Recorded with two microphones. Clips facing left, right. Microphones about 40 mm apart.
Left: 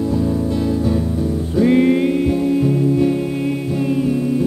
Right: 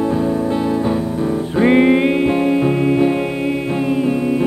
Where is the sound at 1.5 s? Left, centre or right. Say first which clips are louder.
Right 1 dB; right.